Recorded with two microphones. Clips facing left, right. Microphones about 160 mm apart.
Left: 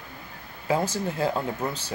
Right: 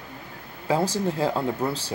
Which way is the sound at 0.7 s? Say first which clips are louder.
Right 2 dB; 30° right (ahead or behind).